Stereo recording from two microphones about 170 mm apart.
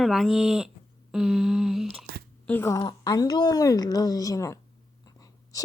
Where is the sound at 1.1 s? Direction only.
Centre (ahead or behind).